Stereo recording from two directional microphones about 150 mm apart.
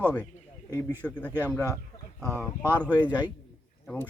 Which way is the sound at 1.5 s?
20° left (ahead or behind).